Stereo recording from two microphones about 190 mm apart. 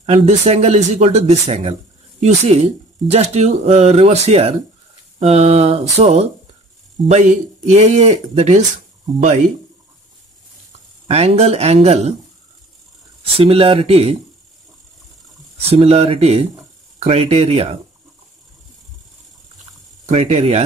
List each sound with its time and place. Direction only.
0.0 s speech: 35° right (ahead or behind)
11.1 s speech: 35° right (ahead or behind)
13.2 s speech: 30° right (ahead or behind)
15.6 s speech: 30° right (ahead or behind)
20.1 s speech: 35° right (ahead or behind)